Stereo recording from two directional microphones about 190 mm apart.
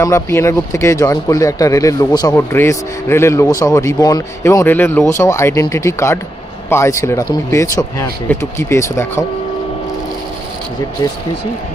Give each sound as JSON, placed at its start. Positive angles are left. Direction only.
{"t": 0.0, "sound": "speech", "side_deg": 15}